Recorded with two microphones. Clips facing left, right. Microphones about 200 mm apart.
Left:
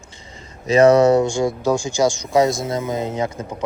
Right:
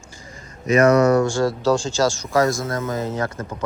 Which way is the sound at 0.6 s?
30° left (ahead or behind).